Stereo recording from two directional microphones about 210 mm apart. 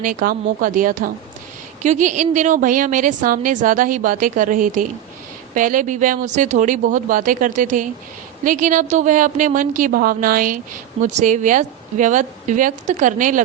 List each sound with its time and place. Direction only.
0.0 s a woman's voice: 40° right (ahead or behind)